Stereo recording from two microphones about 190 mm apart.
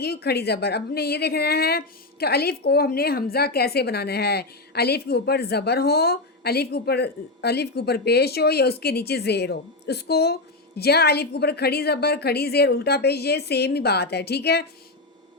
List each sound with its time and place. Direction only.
0.0 s a woman's voice: 55° left (ahead or behind)